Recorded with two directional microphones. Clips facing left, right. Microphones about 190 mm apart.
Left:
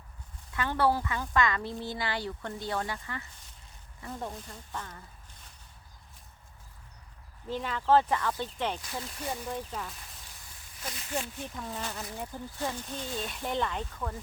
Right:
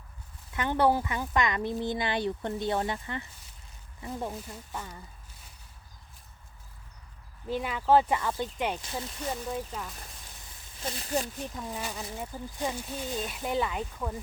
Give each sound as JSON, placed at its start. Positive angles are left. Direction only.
{"t": 0.5, "sound": "speech", "side_deg": -20}
{"t": 4.1, "sound": "speech", "side_deg": -10}
{"t": 7.4, "sound": "speech", "side_deg": -10}
{"t": 8.8, "sound": "speech", "side_deg": -25}
{"t": 9.5, "sound": "speech", "side_deg": 0}
{"t": 10.8, "sound": "speech", "side_deg": -35}
{"t": 11.5, "sound": "speech", "side_deg": -10}